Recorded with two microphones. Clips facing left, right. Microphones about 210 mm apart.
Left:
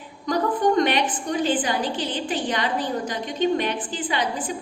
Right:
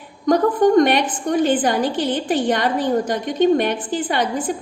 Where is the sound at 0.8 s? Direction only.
50° right (ahead or behind).